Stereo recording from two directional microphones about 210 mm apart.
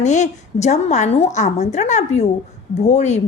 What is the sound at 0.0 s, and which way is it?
A woman's voice, 35° left (ahead or behind).